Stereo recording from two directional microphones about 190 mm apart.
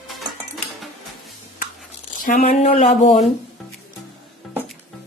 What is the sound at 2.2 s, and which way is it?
Speech, 45° left (ahead or behind).